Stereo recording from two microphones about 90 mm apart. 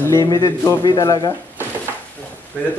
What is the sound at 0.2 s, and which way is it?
A man's voice, 45° left (ahead or behind).